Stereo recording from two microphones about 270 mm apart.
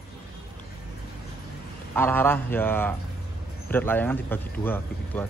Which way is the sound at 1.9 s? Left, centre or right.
Centre.